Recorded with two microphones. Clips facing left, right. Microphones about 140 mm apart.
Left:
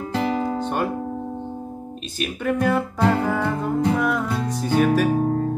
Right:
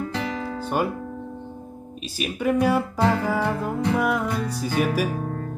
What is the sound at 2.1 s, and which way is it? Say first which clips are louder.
Music: right 1 dB; 10° right (ahead or behind).